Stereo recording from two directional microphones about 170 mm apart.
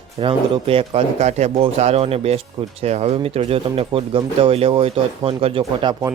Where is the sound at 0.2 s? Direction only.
30° right (ahead or behind).